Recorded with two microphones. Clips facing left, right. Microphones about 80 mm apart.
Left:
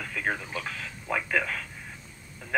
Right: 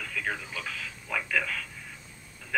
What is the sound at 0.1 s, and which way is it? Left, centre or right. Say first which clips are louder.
Speech: left 3 dB; left.